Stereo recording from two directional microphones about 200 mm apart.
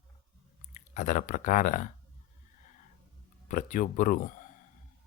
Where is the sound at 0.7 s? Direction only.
35° left (ahead or behind).